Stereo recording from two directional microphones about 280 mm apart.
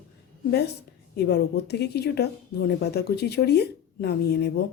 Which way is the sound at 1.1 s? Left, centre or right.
Left.